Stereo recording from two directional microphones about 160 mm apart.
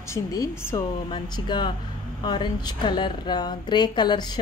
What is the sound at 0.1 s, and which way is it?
A woman's voice, 20° left (ahead or behind).